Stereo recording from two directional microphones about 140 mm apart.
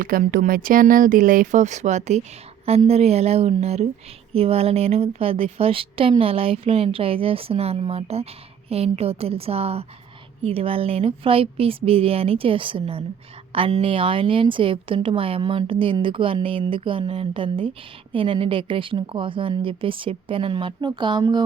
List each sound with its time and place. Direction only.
0.0 s a woman's voice: 85° right; by 21.4 s 30° right (ahead or behind)